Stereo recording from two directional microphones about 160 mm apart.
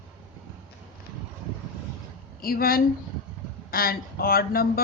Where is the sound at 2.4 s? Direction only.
70° left (ahead or behind).